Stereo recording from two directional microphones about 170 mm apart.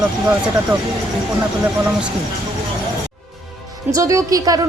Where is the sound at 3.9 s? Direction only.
20° right (ahead or behind).